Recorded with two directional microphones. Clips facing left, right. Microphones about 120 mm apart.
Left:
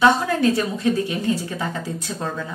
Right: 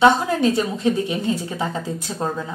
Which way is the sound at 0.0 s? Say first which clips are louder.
Right 1 dB; 20° right (ahead or behind).